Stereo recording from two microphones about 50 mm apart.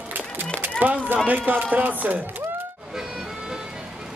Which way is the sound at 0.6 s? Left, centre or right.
Right.